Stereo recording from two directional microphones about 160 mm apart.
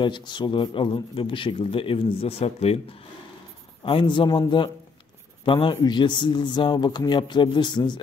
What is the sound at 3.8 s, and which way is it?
A man's voice, 30° left (ahead or behind).